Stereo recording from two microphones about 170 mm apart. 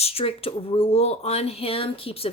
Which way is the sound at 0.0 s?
35° left (ahead or behind).